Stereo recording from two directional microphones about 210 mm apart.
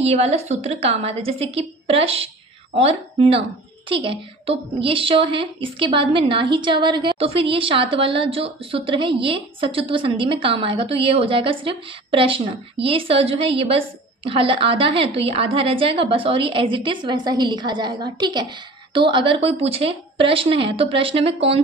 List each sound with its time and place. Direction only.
0.0 s a woman's voice: 30° right (ahead or behind)